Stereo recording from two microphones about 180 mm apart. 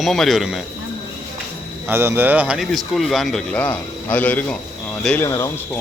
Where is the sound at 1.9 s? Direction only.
10° right (ahead or behind); by 5.8 s 15° left (ahead or behind).